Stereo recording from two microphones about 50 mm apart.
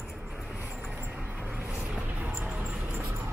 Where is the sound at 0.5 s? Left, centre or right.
Right.